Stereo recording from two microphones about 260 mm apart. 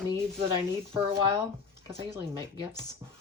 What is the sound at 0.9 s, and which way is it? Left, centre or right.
Speech, centre.